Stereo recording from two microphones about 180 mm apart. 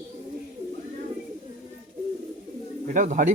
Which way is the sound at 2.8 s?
45° right (ahead or behind).